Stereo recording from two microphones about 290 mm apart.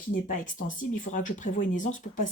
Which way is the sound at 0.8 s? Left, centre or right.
Left.